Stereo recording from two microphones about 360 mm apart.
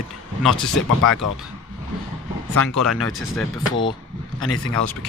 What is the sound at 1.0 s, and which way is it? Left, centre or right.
Speech, left.